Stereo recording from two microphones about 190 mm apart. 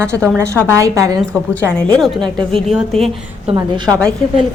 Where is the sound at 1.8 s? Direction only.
5° left (ahead or behind).